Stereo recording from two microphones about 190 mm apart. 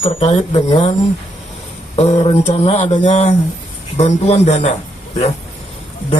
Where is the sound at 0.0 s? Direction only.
30° left (ahead or behind).